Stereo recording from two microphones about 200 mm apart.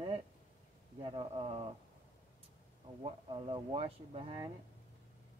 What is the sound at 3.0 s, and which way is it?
Speech, 25° right (ahead or behind).